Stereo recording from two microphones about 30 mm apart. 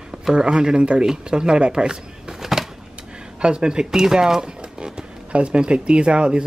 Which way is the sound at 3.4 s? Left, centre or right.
Right.